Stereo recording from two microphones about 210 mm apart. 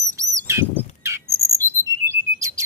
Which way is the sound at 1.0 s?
15° right (ahead or behind).